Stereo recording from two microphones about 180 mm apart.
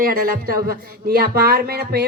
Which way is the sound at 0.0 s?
55° right (ahead or behind).